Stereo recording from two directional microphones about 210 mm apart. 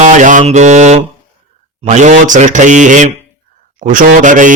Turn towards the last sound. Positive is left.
turn(degrees=-40)  # may be behind; listen again after turning